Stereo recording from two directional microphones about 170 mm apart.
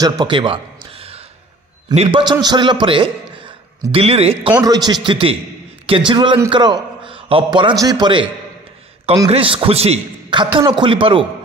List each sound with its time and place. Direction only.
0.0 s a sound: 25° right (ahead or behind)
2.0 s a man's voice: 30° right (ahead or behind)
4.6 s a man's voice: 25° right (ahead or behind)
5.0 s a man's voice: 35° right (ahead or behind)
9.3 s a man's voice: 35° right (ahead or behind)